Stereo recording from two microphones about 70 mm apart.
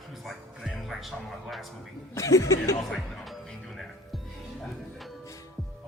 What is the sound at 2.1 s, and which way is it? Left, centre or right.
Speech, left.